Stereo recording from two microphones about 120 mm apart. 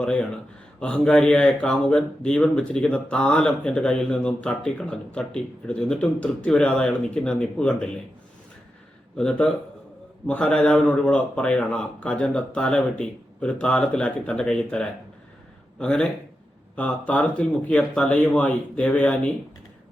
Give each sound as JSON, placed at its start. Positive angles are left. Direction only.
{"t": 0.0, "sound": "speech", "side_deg": 10}
{"t": 9.1, "sound": "speech", "side_deg": 5}